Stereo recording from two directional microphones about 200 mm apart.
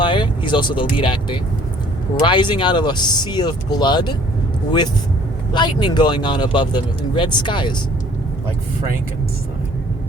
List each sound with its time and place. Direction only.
0.0 s speech: 25° left (ahead or behind)
5.5 s speech: 20° left (ahead or behind)